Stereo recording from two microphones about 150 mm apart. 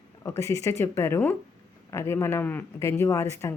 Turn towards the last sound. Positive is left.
turn(degrees=20)  # may be behind; listen again after turning